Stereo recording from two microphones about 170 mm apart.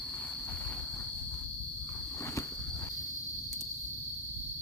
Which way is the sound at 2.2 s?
15° left (ahead or behind).